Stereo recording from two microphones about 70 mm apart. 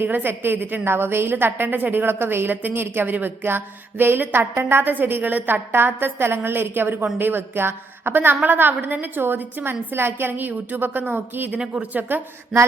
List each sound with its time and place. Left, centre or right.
0.0 s a woman's voice: right
11.6 s speech: centre